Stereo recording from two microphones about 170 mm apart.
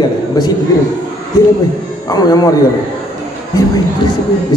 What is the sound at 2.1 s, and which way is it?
Speech, 25° left (ahead or behind).